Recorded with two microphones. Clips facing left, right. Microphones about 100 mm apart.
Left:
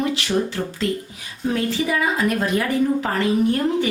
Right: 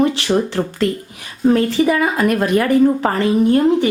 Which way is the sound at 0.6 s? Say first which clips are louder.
Right 6 dB; 60° right (ahead or behind).